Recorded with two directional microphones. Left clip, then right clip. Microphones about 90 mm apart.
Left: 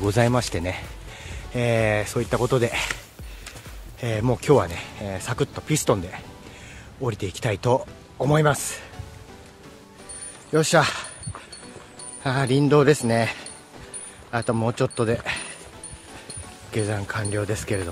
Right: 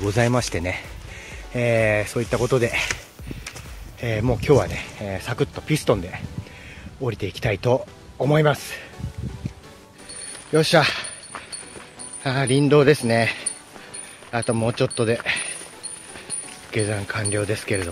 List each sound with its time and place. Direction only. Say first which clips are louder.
0.2 s speech: right 2 dB; 20° left (ahead or behind)
1.1 s speech: right 1 dB; 30° left (ahead or behind)
4.0 s speech: right 1 dB; 30° left (ahead or behind)
10.5 s speech: right 2 dB; 35° left (ahead or behind)
12.2 s speech: right 1 dB; 40° left (ahead or behind)
16.7 s speech: right 2 dB; 30° left (ahead or behind)